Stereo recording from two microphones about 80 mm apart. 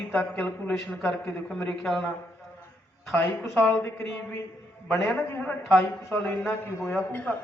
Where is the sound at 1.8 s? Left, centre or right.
Centre.